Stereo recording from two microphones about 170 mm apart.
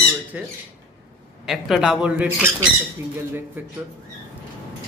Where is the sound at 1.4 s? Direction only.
Centre (ahead or behind).